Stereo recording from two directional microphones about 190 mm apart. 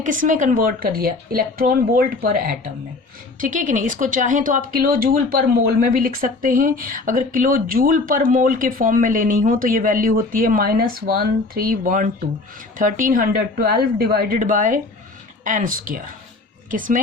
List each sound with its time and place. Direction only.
0.0 s speech: 45° right (ahead or behind)